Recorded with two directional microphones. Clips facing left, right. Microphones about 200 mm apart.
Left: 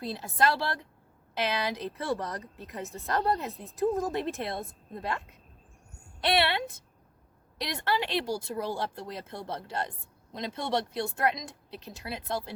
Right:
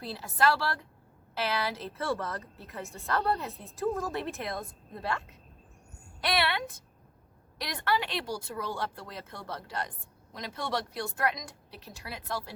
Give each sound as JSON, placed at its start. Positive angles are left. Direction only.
{"t": 0.0, "sound": "a woman's voice", "side_deg": 20}
{"t": 6.2, "sound": "a woman's voice", "side_deg": 25}